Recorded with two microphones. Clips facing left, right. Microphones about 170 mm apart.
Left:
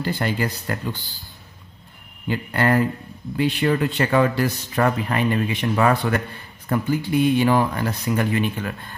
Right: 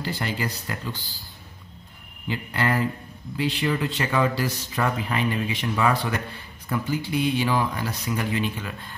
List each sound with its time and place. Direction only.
0.0 s speech: 55° left (ahead or behind)
2.2 s speech: 55° left (ahead or behind)